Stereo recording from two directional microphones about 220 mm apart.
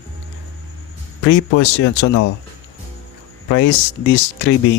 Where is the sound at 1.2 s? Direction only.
65° left (ahead or behind).